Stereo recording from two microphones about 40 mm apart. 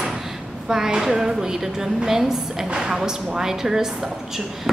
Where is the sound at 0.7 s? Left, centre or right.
Centre.